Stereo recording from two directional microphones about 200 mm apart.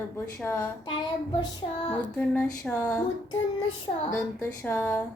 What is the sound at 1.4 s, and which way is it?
Child singing, 25° left (ahead or behind).